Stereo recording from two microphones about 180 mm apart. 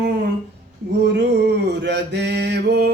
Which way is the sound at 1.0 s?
70° right (ahead or behind).